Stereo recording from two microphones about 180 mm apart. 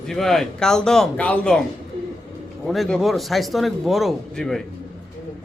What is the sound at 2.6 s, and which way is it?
Speech, centre (ahead or behind).